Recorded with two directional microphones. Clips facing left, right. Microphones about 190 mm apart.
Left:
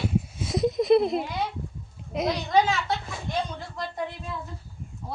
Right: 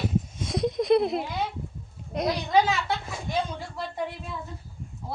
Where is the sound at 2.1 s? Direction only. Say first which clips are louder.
Even; centre (ahead or behind).